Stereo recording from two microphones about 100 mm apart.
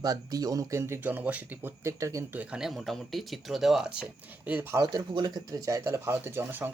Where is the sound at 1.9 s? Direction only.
30° right (ahead or behind).